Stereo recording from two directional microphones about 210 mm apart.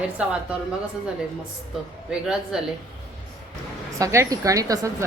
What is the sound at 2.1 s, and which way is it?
Speech, 5° right (ahead or behind).